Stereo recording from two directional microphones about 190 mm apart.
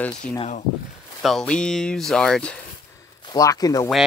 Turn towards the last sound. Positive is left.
turn(degrees=20)  # may be behind; listen again after turning